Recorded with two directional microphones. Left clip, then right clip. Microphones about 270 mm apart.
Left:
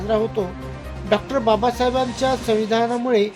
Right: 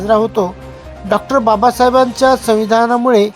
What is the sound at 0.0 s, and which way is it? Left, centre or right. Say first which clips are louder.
Speech: right 8 dB; right.